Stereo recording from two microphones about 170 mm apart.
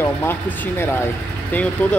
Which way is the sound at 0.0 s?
15° left (ahead or behind).